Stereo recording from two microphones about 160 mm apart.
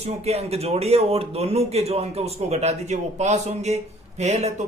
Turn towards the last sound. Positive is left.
turn(degrees=-45)  # may be behind; listen again after turning